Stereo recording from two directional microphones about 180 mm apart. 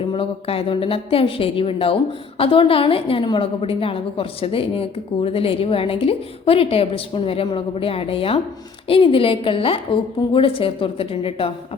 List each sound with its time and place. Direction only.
0.1 s a woman's voice: 30° left (ahead or behind)